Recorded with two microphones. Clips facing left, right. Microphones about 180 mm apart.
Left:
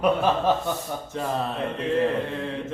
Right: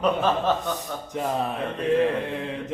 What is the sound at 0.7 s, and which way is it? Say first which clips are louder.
A man's voice: left 1 dB; 15° right (ahead or behind).